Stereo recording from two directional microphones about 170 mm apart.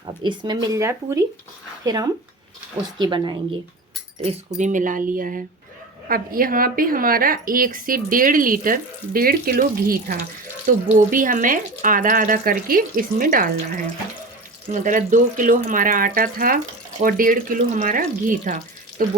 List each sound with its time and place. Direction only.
0.2 s speech: 25° right (ahead or behind)
4.2 s speech: 40° right (ahead or behind)
14.7 s speech: 50° right (ahead or behind)